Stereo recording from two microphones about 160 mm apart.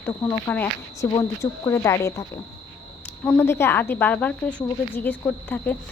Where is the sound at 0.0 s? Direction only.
15° left (ahead or behind).